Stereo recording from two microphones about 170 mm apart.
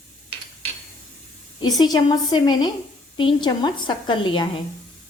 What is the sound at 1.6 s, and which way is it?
A woman's voice, 25° left (ahead or behind).